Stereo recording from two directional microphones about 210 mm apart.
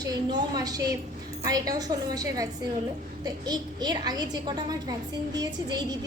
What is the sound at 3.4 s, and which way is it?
A woman's voice, 20° right (ahead or behind).